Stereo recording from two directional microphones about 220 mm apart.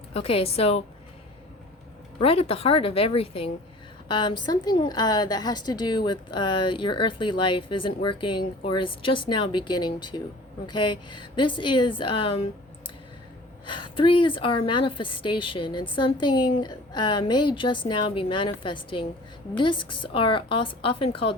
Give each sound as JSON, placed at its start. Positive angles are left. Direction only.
{"t": 0.1, "sound": "a woman's voice", "side_deg": 25}
{"t": 2.1, "sound": "a woman's voice", "side_deg": 25}
{"t": 13.9, "sound": "a woman's voice", "side_deg": 20}